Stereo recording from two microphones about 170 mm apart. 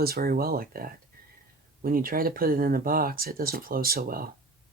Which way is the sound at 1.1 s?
60° right (ahead or behind).